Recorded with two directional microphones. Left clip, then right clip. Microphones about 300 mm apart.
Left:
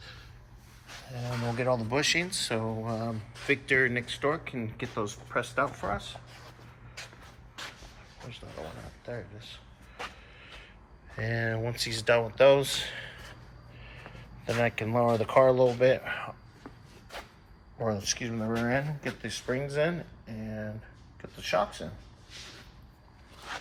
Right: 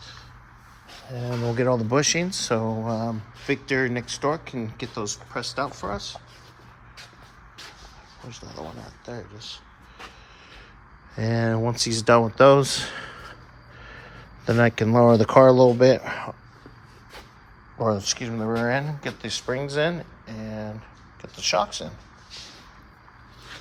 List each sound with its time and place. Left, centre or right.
1.5 s speech: right
2.1 s speech: right
2.6 s speech: right; by 6.0 s centre
8.2 s speech: centre
11.2 s speech: centre
14.9 s speech: right
17.7 s speech: centre